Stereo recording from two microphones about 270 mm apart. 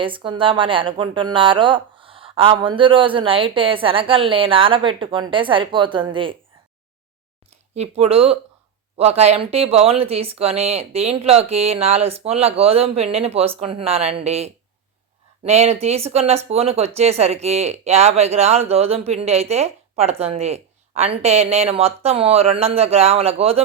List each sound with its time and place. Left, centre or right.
0.0 s speech: centre
7.8 s speech: right